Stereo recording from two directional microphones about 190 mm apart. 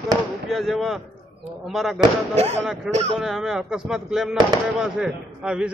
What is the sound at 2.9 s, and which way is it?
Speech, 35° right (ahead or behind).